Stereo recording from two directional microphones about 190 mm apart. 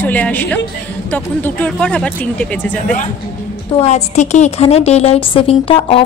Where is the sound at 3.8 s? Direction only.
35° left (ahead or behind).